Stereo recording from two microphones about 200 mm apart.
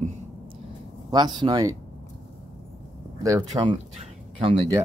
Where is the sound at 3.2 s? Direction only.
20° right (ahead or behind).